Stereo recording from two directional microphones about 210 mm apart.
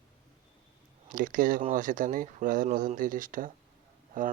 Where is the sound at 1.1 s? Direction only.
40° right (ahead or behind).